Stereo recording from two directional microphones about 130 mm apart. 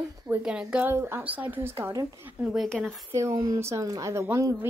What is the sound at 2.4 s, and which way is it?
Speech, 5° right (ahead or behind).